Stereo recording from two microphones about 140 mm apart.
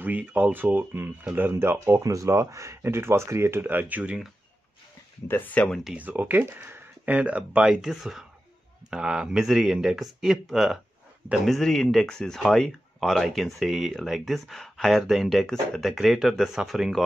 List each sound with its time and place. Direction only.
0.0 s speech: 10° right (ahead or behind)
5.3 s speech: 10° left (ahead or behind)
5.9 s speech: 10° right (ahead or behind)